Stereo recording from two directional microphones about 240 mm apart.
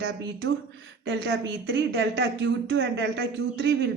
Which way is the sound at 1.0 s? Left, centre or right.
Right.